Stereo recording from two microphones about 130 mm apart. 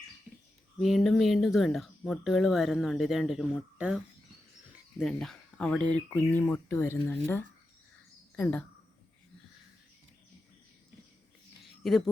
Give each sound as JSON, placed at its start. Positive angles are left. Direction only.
{"t": 0.3, "sound": "a sound", "side_deg": -15}
{"t": 0.8, "sound": "speech", "side_deg": 0}
{"t": 11.8, "sound": "speech", "side_deg": 5}